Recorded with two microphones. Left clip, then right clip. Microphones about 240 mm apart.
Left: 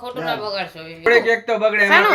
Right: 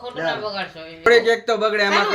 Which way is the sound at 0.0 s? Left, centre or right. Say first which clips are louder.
Even; left.